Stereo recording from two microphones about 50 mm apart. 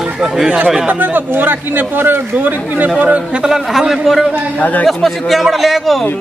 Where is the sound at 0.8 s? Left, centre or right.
Right.